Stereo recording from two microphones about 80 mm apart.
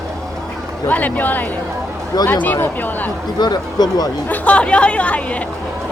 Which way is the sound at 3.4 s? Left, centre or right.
Left.